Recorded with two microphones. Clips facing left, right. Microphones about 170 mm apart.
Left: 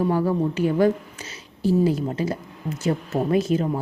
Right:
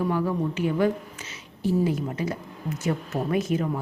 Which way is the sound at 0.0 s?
35° left (ahead or behind).